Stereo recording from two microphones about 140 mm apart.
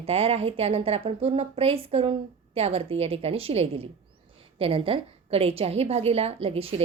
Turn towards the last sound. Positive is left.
turn(degrees=-45)  # may be behind; listen again after turning